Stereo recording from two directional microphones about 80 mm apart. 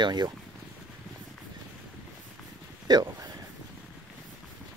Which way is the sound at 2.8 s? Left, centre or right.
Right.